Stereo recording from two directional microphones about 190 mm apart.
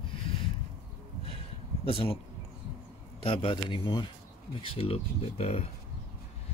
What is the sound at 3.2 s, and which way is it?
Speech, 25° left (ahead or behind).